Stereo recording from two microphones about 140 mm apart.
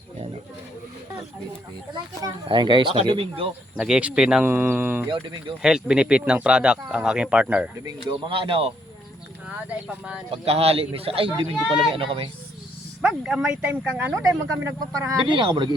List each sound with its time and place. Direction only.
1.9 s a child's voice: 35° right (ahead or behind)
3.8 s speech: 5° right (ahead or behind)
5.0 s a child's voice: 35° right (ahead or behind)
5.6 s speech: 5° right (ahead or behind)
8.3 s a child's voice: 40° right (ahead or behind)
9.6 s speech: 10° right (ahead or behind)
10.3 s a child's voice: 45° right (ahead or behind)
13.0 s a child's voice: 5° right (ahead or behind); by 15.7 s 35° right (ahead or behind)